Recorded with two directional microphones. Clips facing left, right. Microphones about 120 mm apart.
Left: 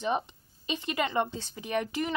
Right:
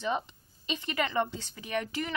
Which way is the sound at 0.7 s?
20° left (ahead or behind).